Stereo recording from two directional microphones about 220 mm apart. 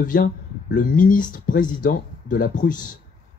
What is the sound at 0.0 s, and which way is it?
Speech, 40° left (ahead or behind).